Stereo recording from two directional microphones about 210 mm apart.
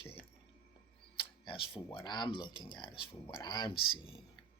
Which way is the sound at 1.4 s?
25° left (ahead or behind).